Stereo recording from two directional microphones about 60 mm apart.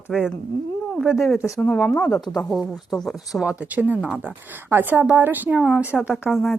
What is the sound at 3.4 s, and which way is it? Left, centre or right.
A woman's voice, right.